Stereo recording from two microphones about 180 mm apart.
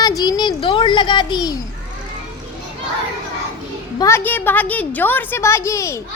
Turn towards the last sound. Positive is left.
turn(degrees=15)  # may be behind; listen again after turning